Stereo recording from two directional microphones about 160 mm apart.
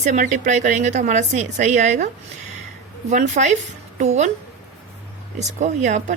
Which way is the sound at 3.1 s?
45° right (ahead or behind).